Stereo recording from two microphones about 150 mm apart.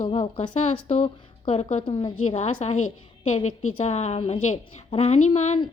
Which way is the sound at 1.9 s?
35° left (ahead or behind).